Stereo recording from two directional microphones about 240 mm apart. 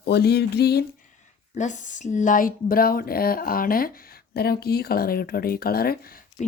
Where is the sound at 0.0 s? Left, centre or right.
Left.